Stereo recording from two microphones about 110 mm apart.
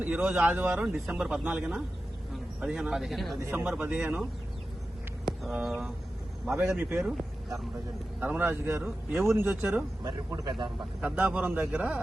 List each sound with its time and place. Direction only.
0.0 s speech: 15° right (ahead or behind)
1.0 s speech: 5° right (ahead or behind)
3.5 s speech: 15° right (ahead or behind)
5.2 s a sound: 5° right (ahead or behind)
6.6 s speech: 20° right (ahead or behind)
8.2 s speech: 15° right (ahead or behind)
10.0 s speech: 40° right (ahead or behind)
11.0 s speech: 10° right (ahead or behind)